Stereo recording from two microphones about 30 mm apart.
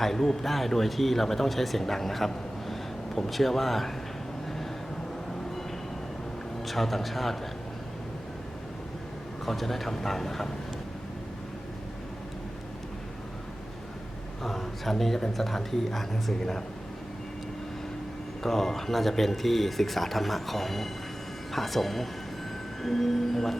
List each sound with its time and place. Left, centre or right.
0.0 s a man's voice: centre
6.7 s speech: centre
9.5 s speech: centre
14.4 s speech: centre
18.4 s speech: centre